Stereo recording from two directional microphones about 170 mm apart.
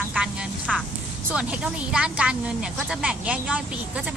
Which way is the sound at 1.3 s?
5° right (ahead or behind).